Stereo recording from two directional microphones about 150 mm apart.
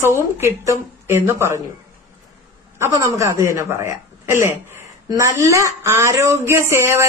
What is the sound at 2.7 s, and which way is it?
A woman's voice, 20° right (ahead or behind).